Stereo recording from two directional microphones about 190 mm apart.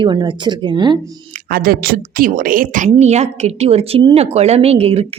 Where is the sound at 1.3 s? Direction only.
50° right (ahead or behind); by 5.1 s 30° right (ahead or behind).